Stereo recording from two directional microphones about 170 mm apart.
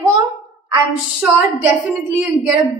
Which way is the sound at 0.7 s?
10° right (ahead or behind).